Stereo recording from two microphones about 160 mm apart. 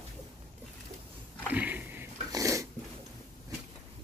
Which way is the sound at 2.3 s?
20° right (ahead or behind).